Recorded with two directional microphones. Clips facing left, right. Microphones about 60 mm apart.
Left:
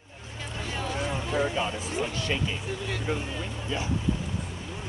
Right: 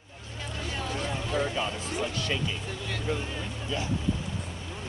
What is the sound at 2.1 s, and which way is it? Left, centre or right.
Speech, left.